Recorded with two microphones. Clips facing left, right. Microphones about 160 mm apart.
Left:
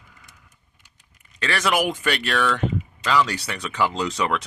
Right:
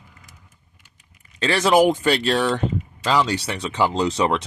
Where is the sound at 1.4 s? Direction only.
30° right (ahead or behind).